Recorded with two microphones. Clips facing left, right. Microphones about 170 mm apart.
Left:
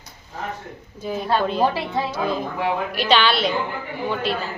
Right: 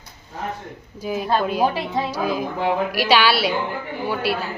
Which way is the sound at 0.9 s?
5° right (ahead or behind).